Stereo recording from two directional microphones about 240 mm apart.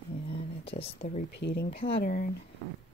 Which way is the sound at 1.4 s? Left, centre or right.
Left.